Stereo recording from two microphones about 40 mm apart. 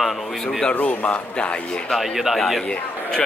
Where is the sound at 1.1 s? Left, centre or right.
Left.